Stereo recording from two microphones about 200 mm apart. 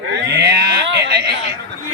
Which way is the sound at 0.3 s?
55° right (ahead or behind).